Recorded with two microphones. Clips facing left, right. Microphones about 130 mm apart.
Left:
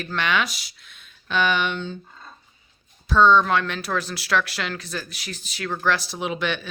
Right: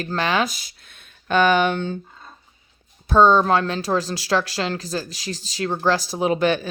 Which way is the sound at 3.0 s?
45° right (ahead or behind).